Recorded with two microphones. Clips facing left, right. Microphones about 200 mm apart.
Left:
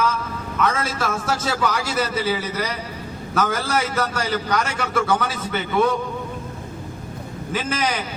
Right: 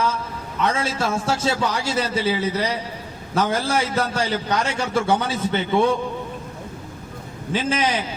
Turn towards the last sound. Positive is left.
turn(degrees=-30)  # may be behind; listen again after turning